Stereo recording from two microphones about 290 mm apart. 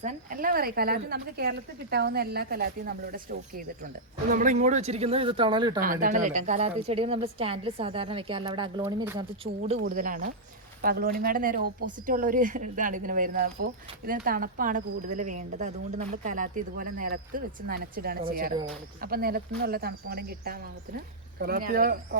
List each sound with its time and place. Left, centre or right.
0.0 s a woman's voice: right
4.3 s speech: right
5.8 s a woman's voice: right